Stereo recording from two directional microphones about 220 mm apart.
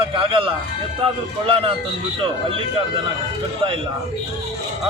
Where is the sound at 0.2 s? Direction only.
25° right (ahead or behind).